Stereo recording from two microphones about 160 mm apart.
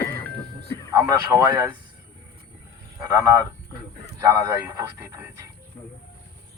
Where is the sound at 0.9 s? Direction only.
20° right (ahead or behind).